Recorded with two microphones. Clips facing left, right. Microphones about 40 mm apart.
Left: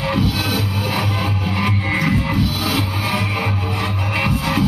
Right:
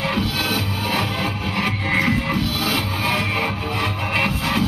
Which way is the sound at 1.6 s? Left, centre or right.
Centre.